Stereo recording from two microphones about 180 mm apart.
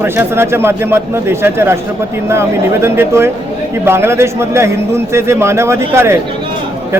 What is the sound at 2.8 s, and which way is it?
A man's voice, 15° right (ahead or behind).